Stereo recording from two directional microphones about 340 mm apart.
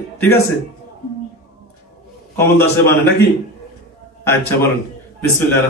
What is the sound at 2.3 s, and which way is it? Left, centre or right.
Speech, centre.